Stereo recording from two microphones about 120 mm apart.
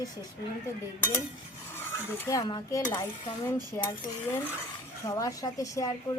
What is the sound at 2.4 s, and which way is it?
Dishes, 35° left (ahead or behind).